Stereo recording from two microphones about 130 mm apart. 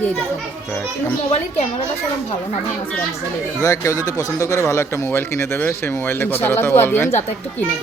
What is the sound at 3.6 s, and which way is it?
Speech, 25° left (ahead or behind).